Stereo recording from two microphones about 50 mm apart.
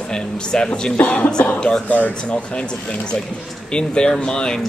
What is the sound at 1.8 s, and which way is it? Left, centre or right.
Speech, left.